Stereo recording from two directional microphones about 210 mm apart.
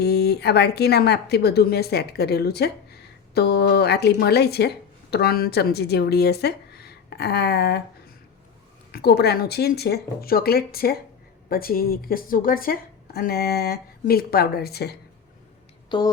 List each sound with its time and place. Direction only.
0.0 s a woman's voice: 50° left (ahead or behind)
8.9 s a woman's voice: 50° left (ahead or behind)
15.9 s speech: 20° left (ahead or behind)